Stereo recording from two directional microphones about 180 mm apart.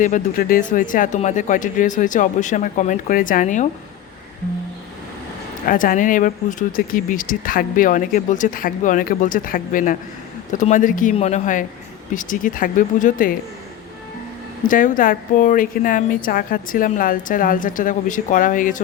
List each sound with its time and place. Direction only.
0.0 s speech: 50° left (ahead or behind)
5.6 s speech: 50° left (ahead or behind)
14.6 s speech: 45° left (ahead or behind)